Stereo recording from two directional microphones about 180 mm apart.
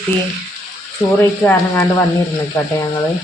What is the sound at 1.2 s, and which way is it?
Speech, 10° left (ahead or behind).